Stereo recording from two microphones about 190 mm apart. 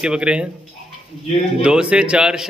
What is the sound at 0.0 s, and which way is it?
Speech, 5° right (ahead or behind).